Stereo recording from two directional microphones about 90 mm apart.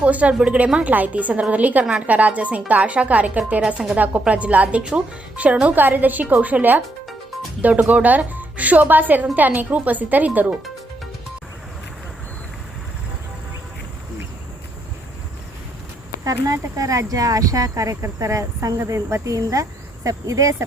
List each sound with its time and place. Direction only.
0.0 s speech: 15° right (ahead or behind)
16.2 s speech: 40° right (ahead or behind)